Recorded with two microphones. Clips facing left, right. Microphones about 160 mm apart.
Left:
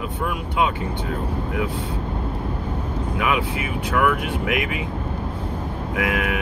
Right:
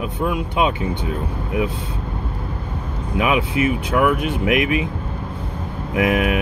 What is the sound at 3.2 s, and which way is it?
Speech, 20° right (ahead or behind).